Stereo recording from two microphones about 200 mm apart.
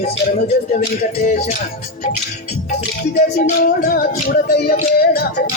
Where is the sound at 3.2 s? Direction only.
45° left (ahead or behind).